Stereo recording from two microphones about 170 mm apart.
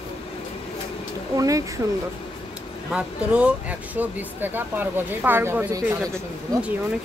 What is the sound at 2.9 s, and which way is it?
Speech, 5° right (ahead or behind).